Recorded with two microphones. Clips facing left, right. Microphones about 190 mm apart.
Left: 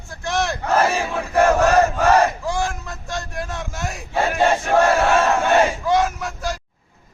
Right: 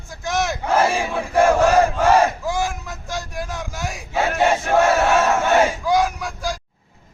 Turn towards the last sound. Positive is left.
turn(degrees=0)  # may be behind; listen again after turning